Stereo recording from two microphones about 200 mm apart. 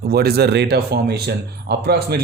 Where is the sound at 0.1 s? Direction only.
50° right (ahead or behind).